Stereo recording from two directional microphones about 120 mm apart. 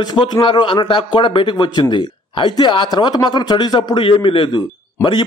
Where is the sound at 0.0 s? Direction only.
40° left (ahead or behind).